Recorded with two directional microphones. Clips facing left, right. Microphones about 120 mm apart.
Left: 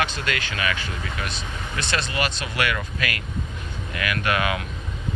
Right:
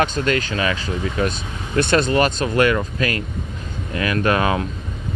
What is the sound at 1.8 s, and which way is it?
Speech, 50° right (ahead or behind).